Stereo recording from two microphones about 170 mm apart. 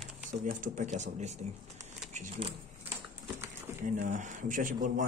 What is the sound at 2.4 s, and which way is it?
Speech, 30° right (ahead or behind).